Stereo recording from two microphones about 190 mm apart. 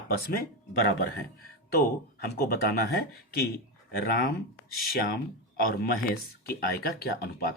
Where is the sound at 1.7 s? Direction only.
55° left (ahead or behind).